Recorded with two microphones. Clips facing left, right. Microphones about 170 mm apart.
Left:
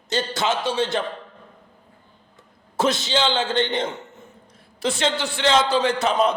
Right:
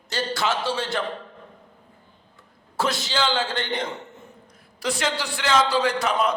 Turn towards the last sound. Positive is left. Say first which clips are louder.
# left 3 dB
turn(degrees=25)  # may be behind; listen again after turning